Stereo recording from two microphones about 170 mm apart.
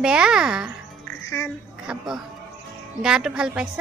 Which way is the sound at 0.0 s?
5° right (ahead or behind).